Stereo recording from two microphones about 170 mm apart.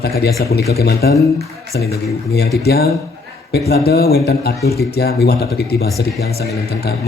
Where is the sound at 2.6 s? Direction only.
65° left (ahead or behind).